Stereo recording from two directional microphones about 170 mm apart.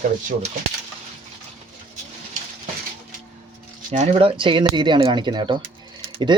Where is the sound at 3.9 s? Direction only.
40° right (ahead or behind).